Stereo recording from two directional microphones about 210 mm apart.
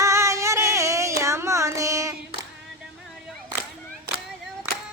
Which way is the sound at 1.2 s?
15° right (ahead or behind).